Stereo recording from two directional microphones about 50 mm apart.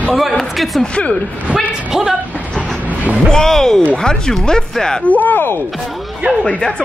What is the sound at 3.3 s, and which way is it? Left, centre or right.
Speech, centre.